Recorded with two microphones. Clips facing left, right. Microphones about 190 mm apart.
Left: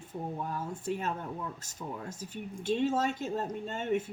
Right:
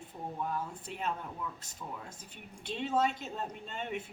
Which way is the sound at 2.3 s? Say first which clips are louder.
Left 11 dB; 45° left (ahead or behind).